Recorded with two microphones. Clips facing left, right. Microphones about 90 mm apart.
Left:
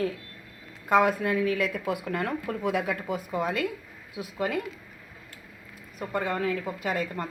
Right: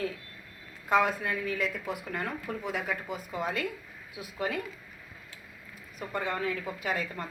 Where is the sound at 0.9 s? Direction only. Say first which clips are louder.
Left 4 dB; 50° left (ahead or behind).